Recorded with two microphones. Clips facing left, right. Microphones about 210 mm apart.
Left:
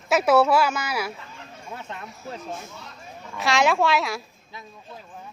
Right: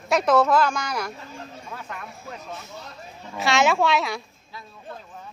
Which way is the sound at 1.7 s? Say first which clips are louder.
Left 2 dB; 25° left (ahead or behind).